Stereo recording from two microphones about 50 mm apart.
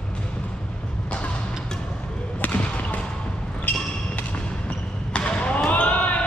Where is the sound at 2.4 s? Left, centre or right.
Left.